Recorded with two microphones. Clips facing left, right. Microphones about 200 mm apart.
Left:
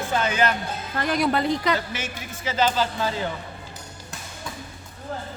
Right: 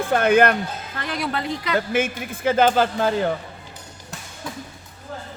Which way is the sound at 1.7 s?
55° right (ahead or behind).